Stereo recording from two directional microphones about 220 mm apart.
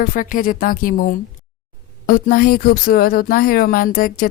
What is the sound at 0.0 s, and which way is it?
Music, 40° left (ahead or behind).